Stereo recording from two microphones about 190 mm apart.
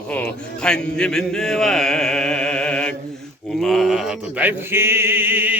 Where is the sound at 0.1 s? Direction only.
5° left (ahead or behind).